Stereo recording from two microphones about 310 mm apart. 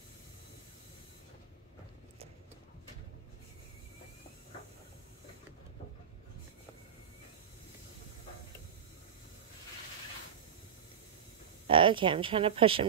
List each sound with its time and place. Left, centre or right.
11.6 s a woman's voice: centre